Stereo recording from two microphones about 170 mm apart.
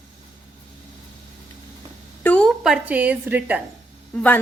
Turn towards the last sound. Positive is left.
turn(degrees=10)  # may be behind; listen again after turning